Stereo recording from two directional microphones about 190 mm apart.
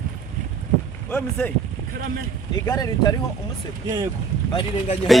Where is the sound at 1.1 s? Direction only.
5° left (ahead or behind).